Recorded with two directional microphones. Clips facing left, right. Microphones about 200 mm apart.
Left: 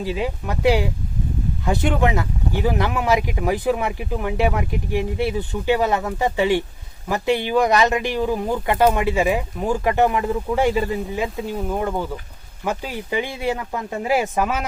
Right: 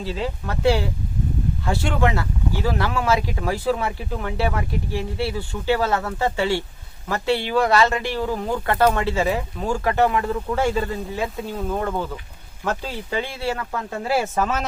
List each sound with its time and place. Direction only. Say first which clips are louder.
0.0 s speech: left 3 dB; 15° left (ahead or behind)